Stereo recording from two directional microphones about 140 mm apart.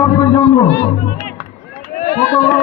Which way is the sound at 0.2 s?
20° left (ahead or behind).